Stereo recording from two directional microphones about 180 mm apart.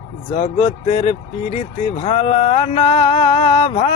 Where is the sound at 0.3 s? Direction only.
40° left (ahead or behind).